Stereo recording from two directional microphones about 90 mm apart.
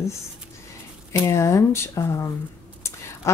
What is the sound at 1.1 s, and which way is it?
Speech, 35° left (ahead or behind).